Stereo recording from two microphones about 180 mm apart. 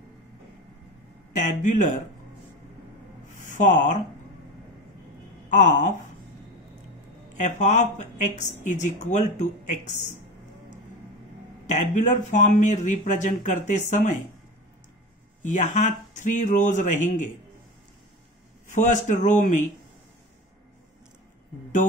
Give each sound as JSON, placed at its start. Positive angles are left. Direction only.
{"t": 1.3, "sound": "speech", "side_deg": 45}
{"t": 3.4, "sound": "speech", "side_deg": 45}
{"t": 5.5, "sound": "speech", "side_deg": 45}
{"t": 7.3, "sound": "speech", "side_deg": 40}
{"t": 11.6, "sound": "speech", "side_deg": 45}
{"t": 15.4, "sound": "speech", "side_deg": 45}
{"t": 18.7, "sound": "speech", "side_deg": 45}